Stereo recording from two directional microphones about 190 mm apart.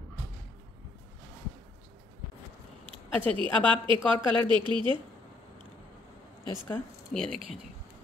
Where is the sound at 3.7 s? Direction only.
25° right (ahead or behind).